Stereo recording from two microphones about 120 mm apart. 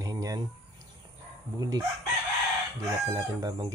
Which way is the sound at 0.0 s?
30° right (ahead or behind).